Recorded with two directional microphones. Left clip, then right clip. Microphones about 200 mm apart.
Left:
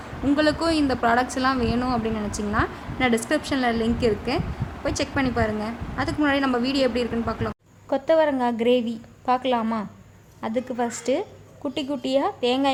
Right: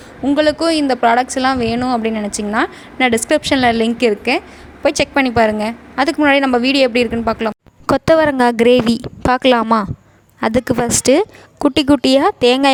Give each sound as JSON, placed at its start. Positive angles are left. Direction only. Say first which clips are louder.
{"t": 0.3, "sound": "a woman's voice", "louder": "right 7 dB", "side_deg": -35}